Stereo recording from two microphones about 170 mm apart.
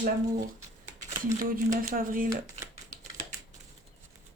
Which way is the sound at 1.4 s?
55° right (ahead or behind).